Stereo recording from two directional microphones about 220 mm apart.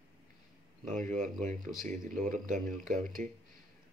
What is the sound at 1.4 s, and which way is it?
Speech, 35° right (ahead or behind).